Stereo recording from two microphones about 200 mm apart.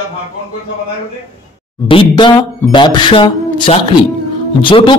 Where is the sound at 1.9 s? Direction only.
25° left (ahead or behind).